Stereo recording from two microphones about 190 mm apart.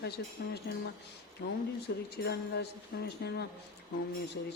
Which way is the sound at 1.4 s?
55° left (ahead or behind).